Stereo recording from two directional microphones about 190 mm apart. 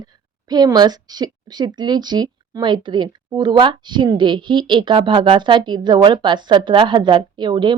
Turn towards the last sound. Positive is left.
turn(degrees=-25)  # may be behind; listen again after turning